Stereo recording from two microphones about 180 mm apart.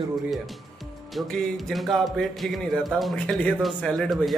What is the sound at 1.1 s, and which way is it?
A man's voice, centre (ahead or behind).